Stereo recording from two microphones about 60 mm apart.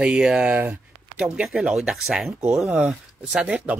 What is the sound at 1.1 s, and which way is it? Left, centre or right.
Speech, centre.